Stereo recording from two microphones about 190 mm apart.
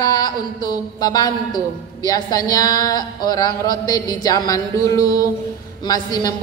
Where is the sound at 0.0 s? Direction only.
20° left (ahead or behind).